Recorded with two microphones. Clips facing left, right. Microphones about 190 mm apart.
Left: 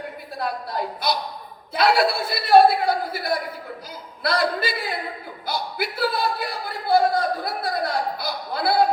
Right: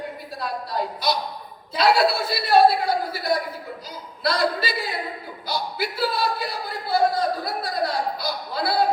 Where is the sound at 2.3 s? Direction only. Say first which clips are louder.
Left 3 dB; 55° left (ahead or behind).